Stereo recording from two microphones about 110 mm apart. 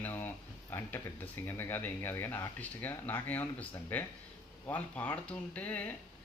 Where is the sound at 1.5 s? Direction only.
20° left (ahead or behind).